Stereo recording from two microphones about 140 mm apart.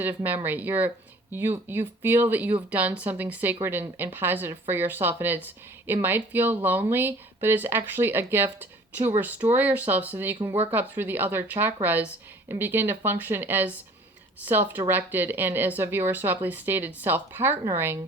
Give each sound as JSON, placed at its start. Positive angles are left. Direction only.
{"t": 0.0, "sound": "speech", "side_deg": -15}